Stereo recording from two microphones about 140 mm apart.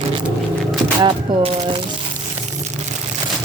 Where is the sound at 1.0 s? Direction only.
40° right (ahead or behind).